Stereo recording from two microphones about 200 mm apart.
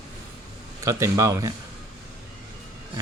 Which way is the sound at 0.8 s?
15° right (ahead or behind).